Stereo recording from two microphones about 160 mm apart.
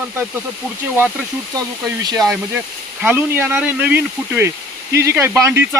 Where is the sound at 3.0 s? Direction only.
10° right (ahead or behind).